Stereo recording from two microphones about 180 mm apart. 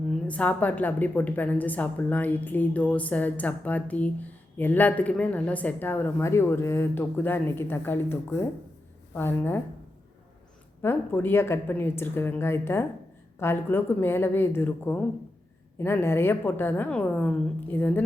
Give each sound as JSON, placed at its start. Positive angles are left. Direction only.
{"t": 0.1, "sound": "a woman's voice", "side_deg": 5}
{"t": 10.8, "sound": "a woman's voice", "side_deg": 10}